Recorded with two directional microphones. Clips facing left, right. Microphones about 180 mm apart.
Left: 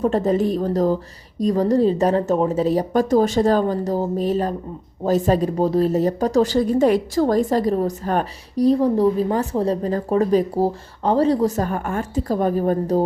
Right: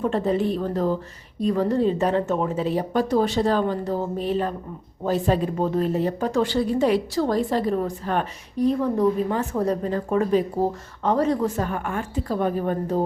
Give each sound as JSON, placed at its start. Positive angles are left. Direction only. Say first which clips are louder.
{"t": 0.0, "sound": "speech", "louder": "left 4 dB", "side_deg": 40}